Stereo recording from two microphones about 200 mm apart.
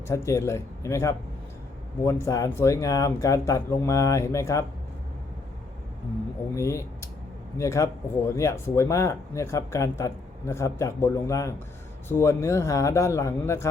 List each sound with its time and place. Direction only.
0.1 s speech: 15° left (ahead or behind)
6.6 s speech: 15° left (ahead or behind)